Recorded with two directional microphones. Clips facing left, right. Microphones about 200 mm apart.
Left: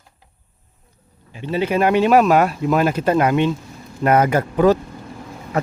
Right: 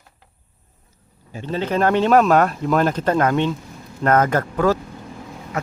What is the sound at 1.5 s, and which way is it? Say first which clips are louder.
Speech: left 2 dB; 10° left (ahead or behind).